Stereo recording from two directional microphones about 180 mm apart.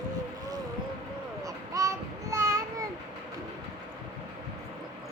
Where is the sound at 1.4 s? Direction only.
20° right (ahead or behind).